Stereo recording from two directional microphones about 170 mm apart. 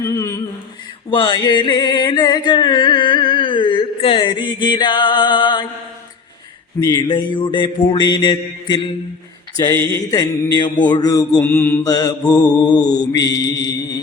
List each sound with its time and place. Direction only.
0.0 s mantra: 15° left (ahead or behind)
1.1 s music: 25° left (ahead or behind)
6.7 s mantra: 20° left (ahead or behind)
9.6 s mantra: 15° left (ahead or behind)
11.3 s mantra: 10° left (ahead or behind)
11.8 s mantra: 20° left (ahead or behind)